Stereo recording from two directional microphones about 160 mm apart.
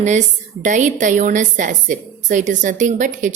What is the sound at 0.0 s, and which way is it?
A woman's voice, 50° right (ahead or behind).